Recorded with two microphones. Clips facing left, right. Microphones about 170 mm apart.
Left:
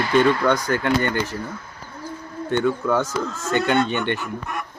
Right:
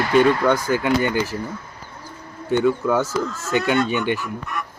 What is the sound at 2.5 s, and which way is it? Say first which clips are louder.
Speech: right 2 dB; 5° right (ahead or behind).